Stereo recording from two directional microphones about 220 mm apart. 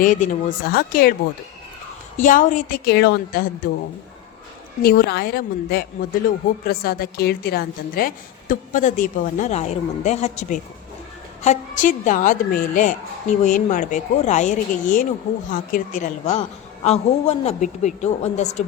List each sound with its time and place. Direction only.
0.0 s speech: 35° left (ahead or behind)
2.1 s speech: 35° left (ahead or behind)
4.8 s speech: 45° left (ahead or behind)